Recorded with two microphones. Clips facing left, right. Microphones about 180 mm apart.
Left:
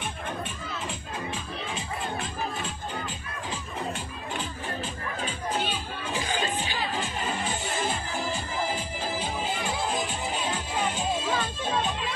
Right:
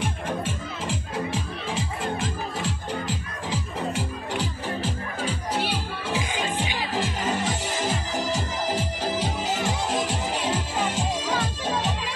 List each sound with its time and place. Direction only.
0.0 s music: 90° right